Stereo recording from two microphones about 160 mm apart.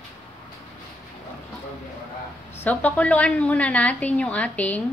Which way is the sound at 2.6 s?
10° left (ahead or behind).